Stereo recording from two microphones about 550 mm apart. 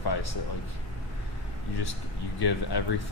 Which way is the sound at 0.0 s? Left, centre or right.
Left.